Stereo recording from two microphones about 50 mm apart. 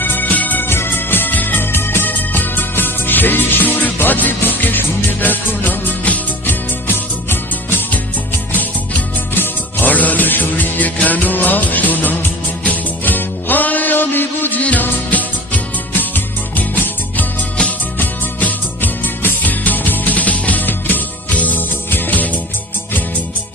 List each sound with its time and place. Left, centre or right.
0.0 s music: left
0.7 s music: left
9.9 s music: left
14.6 s music: left